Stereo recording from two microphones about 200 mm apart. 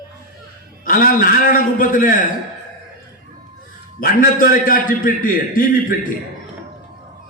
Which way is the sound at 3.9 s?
45° left (ahead or behind).